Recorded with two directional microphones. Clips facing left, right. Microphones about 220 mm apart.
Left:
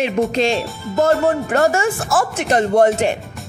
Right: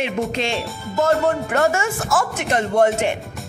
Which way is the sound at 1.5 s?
35° left (ahead or behind).